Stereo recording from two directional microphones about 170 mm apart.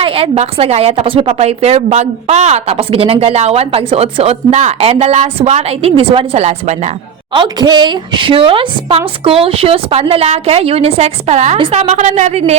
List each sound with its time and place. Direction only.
0.0 s a woman's voice: 35° right (ahead or behind)
7.3 s a woman's voice: 25° right (ahead or behind)